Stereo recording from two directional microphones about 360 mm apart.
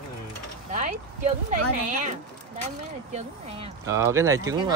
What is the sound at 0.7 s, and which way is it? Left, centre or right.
Speech, right.